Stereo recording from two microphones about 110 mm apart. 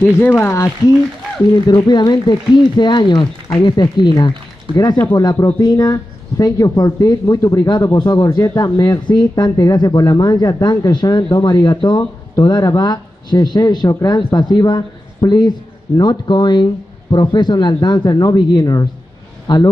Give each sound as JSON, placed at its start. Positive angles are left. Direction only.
{"t": 0.0, "sound": "speech", "side_deg": 20}
{"t": 1.5, "sound": "speech", "side_deg": 40}